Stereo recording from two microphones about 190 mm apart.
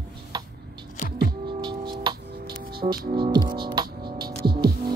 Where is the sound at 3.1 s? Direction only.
25° right (ahead or behind).